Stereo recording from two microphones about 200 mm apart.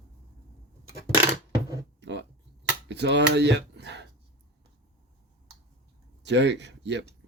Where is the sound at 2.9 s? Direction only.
60° right (ahead or behind).